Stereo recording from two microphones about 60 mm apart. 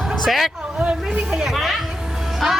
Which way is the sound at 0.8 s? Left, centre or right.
Right.